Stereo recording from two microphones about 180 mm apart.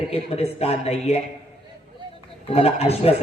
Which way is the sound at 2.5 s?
35° left (ahead or behind).